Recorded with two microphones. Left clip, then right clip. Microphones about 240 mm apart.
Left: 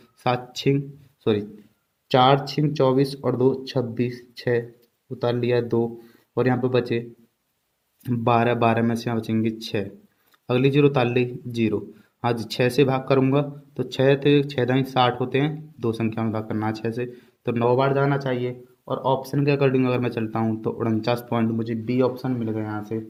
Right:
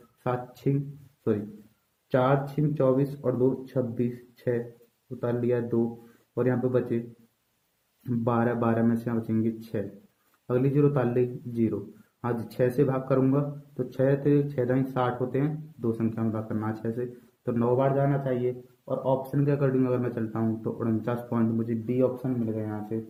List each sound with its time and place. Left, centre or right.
0.2 s speech: left
2.0 s speech: left
5.2 s speech: left
8.0 s speech: left